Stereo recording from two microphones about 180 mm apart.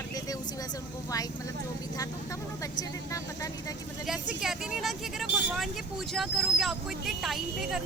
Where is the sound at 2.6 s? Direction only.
20° left (ahead or behind).